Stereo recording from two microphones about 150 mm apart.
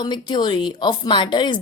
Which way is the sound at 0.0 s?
30° left (ahead or behind).